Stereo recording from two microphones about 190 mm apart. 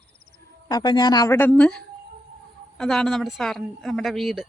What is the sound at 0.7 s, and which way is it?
A woman's voice, 20° left (ahead or behind).